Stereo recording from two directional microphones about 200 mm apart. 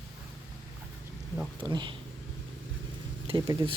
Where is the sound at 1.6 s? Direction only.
25° right (ahead or behind).